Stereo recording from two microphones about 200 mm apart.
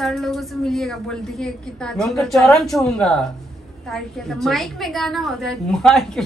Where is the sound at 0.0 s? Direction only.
Centre (ahead or behind).